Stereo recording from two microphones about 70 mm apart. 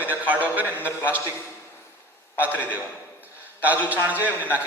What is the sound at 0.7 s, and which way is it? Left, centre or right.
Speech, left.